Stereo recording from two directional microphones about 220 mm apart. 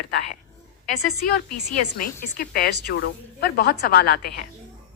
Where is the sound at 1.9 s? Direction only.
40° left (ahead or behind).